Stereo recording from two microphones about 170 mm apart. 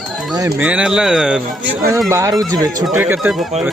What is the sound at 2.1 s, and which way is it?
Speech, 20° right (ahead or behind).